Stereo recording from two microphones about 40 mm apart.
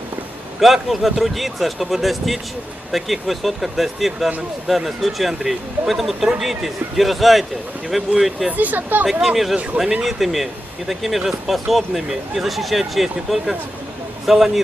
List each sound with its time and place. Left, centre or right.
0.6 s speech: centre
8.5 s speech: right
9.2 s speech: centre